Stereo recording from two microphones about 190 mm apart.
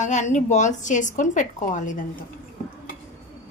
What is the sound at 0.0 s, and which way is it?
A woman's voice, 40° left (ahead or behind).